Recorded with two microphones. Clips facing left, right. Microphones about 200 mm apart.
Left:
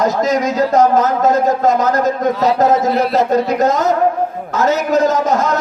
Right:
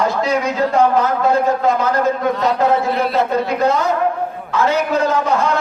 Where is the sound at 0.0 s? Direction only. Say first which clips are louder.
Left 3 dB; 40° left (ahead or behind).